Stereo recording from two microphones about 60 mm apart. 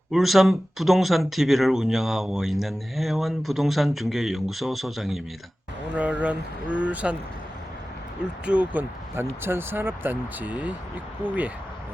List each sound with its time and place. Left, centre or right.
0.1 s speech: centre
5.9 s speech: right
8.4 s speech: right
8.8 s speech: right